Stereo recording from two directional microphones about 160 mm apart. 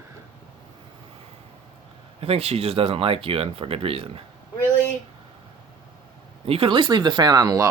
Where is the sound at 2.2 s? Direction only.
40° right (ahead or behind).